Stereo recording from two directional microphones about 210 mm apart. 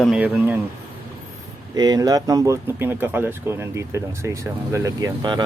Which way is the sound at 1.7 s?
20° right (ahead or behind).